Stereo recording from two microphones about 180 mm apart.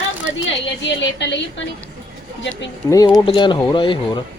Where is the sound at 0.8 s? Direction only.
80° left.